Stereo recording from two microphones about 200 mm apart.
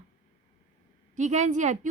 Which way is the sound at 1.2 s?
35° right (ahead or behind).